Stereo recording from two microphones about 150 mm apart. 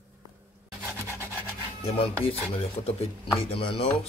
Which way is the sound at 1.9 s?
40° left (ahead or behind).